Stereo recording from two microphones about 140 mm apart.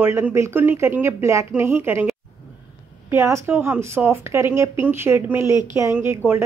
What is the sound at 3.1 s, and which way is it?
Speech, 20° right (ahead or behind).